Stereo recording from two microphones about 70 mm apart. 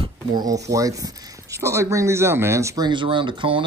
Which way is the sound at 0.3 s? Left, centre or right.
Right.